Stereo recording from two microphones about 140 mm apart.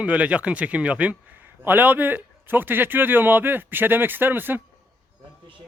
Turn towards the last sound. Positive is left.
turn(degrees=-15)  # may be behind; listen again after turning